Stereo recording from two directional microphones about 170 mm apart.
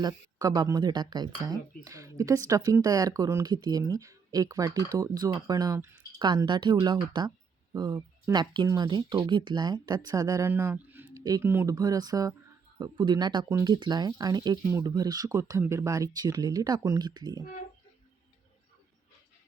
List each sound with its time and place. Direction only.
0.0 s speech: 20° right (ahead or behind)